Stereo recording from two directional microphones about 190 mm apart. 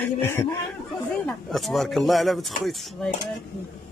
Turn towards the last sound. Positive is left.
turn(degrees=0)  # may be behind; listen again after turning